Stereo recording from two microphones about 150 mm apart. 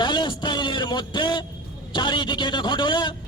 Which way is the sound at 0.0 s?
30° left (ahead or behind).